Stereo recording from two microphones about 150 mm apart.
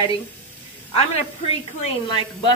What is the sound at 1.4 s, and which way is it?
Speech, 40° left (ahead or behind).